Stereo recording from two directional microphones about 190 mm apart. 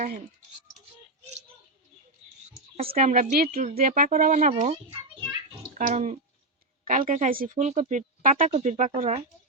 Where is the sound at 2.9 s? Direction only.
40° right (ahead or behind).